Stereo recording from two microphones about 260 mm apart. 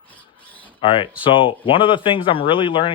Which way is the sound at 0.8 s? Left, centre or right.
Centre.